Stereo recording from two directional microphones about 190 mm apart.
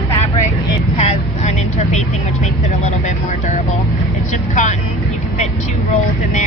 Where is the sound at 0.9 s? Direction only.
35° left (ahead or behind).